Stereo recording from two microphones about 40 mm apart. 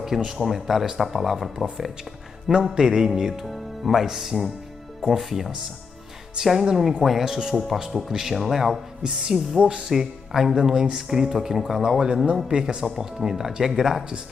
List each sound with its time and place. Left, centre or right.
0.0 s speech: centre
6.4 s speech: right
6.7 s speech: centre
9.0 s speech: right
9.8 s speech: centre